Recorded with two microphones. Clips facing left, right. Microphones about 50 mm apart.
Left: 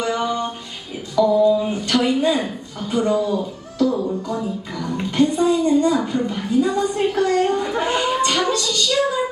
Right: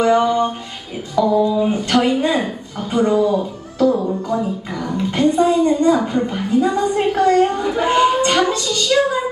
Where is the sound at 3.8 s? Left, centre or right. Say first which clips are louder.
Right 3 dB; centre.